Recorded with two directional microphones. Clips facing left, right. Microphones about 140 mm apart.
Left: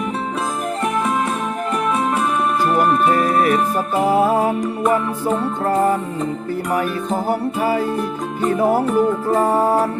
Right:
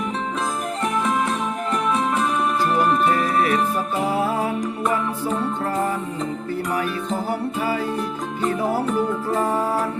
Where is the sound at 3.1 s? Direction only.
45° left (ahead or behind).